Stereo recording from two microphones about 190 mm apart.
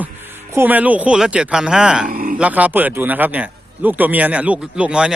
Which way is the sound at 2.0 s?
45° right (ahead or behind).